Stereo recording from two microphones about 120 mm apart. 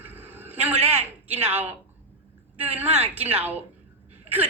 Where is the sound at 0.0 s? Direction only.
15° right (ahead or behind).